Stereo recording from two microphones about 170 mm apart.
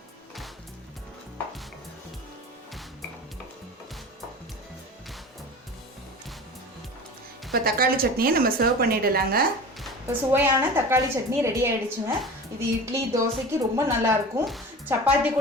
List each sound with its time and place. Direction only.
7.5 s a woman's voice: 60° right (ahead or behind)
10.1 s a woman's voice: 15° right (ahead or behind)